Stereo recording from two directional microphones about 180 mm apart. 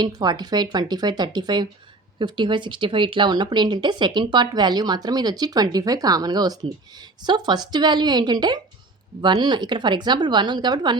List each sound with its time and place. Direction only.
0.0 s speech: 25° right (ahead or behind)